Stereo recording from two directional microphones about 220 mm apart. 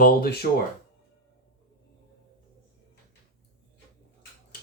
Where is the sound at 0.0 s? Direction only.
45° left (ahead or behind).